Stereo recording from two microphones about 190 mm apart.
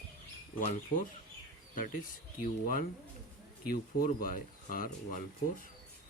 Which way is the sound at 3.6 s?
50° left (ahead or behind).